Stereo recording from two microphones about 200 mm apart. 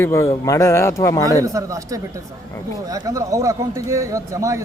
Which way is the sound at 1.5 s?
15° right (ahead or behind).